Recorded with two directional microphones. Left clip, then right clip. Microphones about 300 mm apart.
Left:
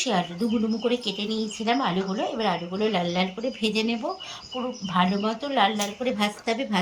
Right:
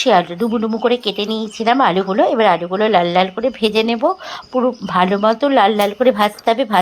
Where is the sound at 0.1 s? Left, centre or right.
Right.